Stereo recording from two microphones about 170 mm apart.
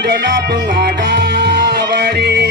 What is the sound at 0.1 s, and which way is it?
Music, 80° right.